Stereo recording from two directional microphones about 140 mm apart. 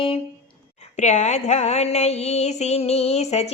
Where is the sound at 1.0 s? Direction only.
55° left (ahead or behind).